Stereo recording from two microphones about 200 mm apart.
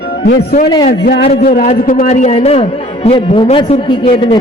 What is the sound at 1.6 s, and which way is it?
A man's voice, 35° left (ahead or behind).